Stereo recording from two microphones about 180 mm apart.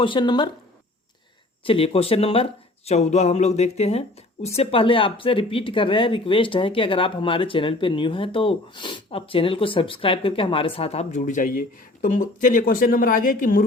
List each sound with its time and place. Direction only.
0.0 s speech: 25° left (ahead or behind)
1.6 s speech: 30° left (ahead or behind); by 13.7 s 50° left (ahead or behind)